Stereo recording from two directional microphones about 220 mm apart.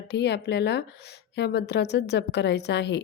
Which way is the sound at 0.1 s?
50° left (ahead or behind).